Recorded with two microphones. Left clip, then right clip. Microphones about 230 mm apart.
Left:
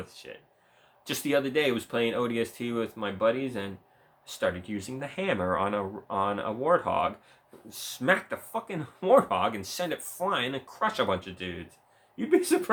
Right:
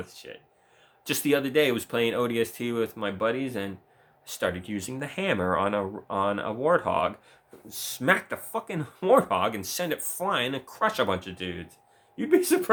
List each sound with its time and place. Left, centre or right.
0.0 s speech: right